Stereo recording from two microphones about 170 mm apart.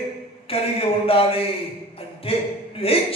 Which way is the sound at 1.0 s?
35° left (ahead or behind).